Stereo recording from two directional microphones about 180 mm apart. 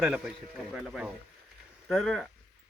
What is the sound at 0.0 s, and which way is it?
Speech, 5° right (ahead or behind).